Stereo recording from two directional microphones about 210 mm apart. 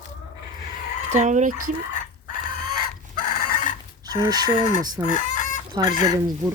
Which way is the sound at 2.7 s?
45° left (ahead or behind).